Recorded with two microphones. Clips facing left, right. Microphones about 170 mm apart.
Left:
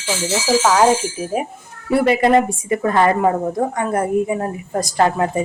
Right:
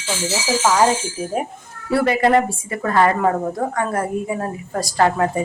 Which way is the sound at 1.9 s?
20° left (ahead or behind).